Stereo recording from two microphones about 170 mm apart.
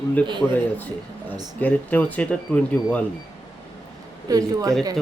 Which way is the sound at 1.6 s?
10° left (ahead or behind).